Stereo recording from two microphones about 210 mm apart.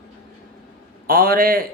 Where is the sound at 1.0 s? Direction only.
45° right (ahead or behind).